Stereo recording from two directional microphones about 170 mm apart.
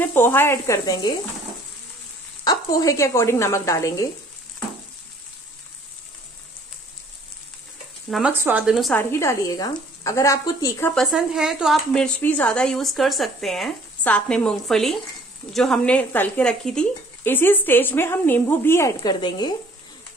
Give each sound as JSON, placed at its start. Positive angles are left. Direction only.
{"t": 0.0, "sound": "speech", "side_deg": 10}
{"t": 2.4, "sound": "a woman's voice", "side_deg": 20}
{"t": 8.1, "sound": "speech", "side_deg": -10}
{"t": 8.9, "sound": "a woman's voice", "side_deg": 15}
{"t": 11.0, "sound": "speech", "side_deg": 0}